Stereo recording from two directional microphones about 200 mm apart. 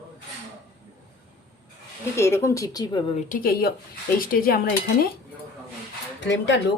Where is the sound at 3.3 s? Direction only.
45° left (ahead or behind).